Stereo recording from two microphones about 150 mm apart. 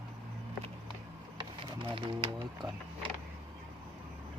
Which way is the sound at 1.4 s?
35° right (ahead or behind).